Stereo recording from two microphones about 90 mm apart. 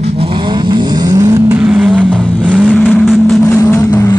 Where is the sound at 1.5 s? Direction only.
10° right (ahead or behind).